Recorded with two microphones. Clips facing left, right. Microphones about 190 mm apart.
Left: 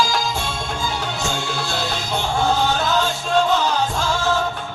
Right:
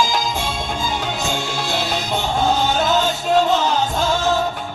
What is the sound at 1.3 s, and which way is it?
Music, 20° right (ahead or behind).